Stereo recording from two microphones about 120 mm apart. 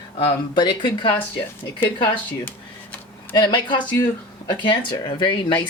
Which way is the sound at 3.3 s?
40° left (ahead or behind).